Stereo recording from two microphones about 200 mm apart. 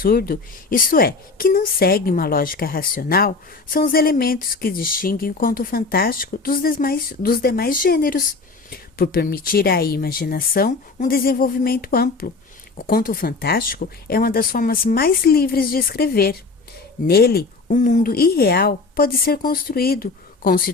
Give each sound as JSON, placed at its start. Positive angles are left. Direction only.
{"t": 0.0, "sound": "a woman's voice", "side_deg": 50}